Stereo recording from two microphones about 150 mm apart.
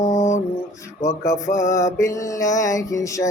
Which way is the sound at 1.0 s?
20° left (ahead or behind).